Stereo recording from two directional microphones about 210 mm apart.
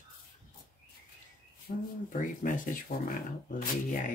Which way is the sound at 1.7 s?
40° left (ahead or behind).